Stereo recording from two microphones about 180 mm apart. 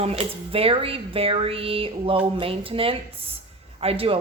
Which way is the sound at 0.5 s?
30° right (ahead or behind).